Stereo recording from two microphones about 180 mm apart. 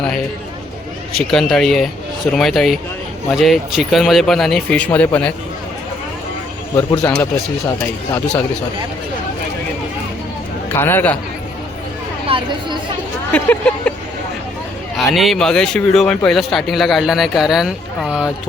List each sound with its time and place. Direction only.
1.1 s a man's voice: centre (ahead or behind)
7.0 s speech: 5° left (ahead or behind)
10.7 s speech: 10° left (ahead or behind)
12.3 s a sound: 30° right (ahead or behind)
13.3 s speech: 10° left (ahead or behind)
14.9 s a man's voice: centre (ahead or behind)